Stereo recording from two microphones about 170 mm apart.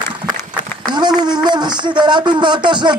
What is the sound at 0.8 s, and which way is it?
A man's voice, 25° right (ahead or behind).